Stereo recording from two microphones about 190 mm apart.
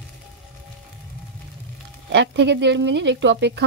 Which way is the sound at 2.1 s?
65° right (ahead or behind).